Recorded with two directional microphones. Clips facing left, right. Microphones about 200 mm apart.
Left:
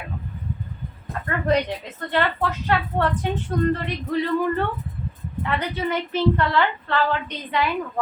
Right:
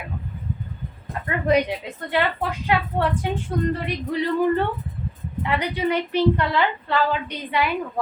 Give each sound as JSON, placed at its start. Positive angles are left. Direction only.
{"t": 1.3, "sound": "a woman's voice", "side_deg": -10}